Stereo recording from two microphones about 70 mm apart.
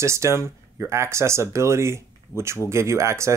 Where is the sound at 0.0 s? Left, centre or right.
Right.